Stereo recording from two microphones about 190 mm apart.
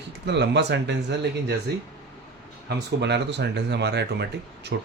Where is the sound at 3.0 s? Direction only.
65° right (ahead or behind).